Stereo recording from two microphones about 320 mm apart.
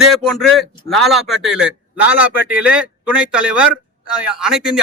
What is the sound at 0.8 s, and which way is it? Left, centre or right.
A man's voice, centre.